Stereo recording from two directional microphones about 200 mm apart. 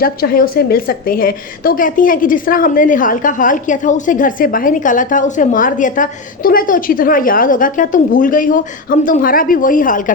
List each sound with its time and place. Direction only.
0.0 s a woman's voice: 45° left (ahead or behind)